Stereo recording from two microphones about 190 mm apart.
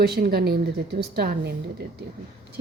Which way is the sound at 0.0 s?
55° right (ahead or behind).